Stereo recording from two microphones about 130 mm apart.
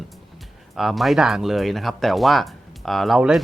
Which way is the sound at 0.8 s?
Centre (ahead or behind).